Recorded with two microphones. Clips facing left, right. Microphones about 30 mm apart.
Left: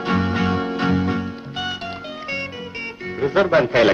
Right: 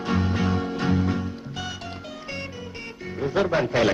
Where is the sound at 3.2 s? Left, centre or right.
Left.